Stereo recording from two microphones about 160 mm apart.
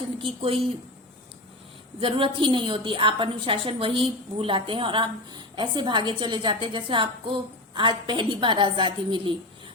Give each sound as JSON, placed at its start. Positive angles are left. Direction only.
{"t": 0.2, "sound": "a woman's voice", "side_deg": -35}
{"t": 2.0, "sound": "a woman's voice", "side_deg": -35}